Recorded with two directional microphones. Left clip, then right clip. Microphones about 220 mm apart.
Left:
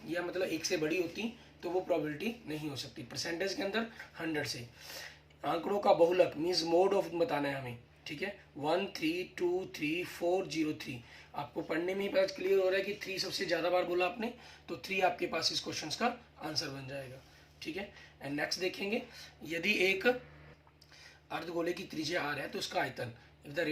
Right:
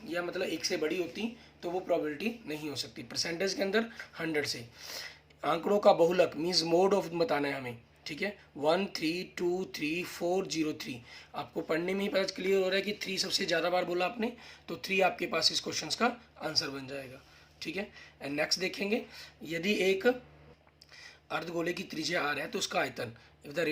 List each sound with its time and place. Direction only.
0.1 s speech: 35° right (ahead or behind)
21.2 s speech: 30° right (ahead or behind)